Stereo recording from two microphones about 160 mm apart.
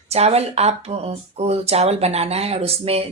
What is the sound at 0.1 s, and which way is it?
Speech, 40° right (ahead or behind).